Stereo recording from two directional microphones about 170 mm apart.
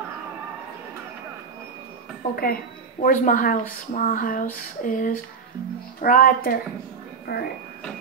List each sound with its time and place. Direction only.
2.2 s a woman's voice: 60° left (ahead or behind)
3.0 s a sound: 50° left (ahead or behind)
5.9 s speech: 55° left (ahead or behind)